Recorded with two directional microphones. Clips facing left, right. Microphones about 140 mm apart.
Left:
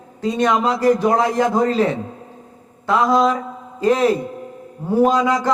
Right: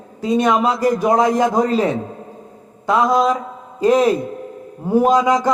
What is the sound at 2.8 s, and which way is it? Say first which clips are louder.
Speech: right 1 dB; 15° right (ahead or behind).